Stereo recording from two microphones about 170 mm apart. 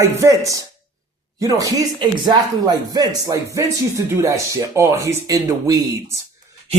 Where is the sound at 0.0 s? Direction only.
20° right (ahead or behind).